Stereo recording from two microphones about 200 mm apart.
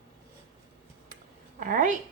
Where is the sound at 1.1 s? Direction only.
40° right (ahead or behind).